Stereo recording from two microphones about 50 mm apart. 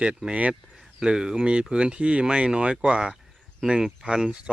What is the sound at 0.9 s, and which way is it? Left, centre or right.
Speech, centre.